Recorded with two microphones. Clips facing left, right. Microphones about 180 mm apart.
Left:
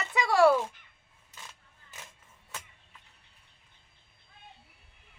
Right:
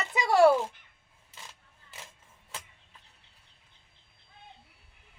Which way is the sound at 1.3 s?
30° right (ahead or behind).